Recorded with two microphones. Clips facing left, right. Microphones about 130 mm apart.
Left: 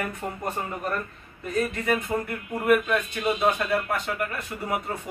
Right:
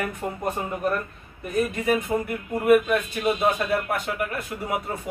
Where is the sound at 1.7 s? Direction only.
10° right (ahead or behind).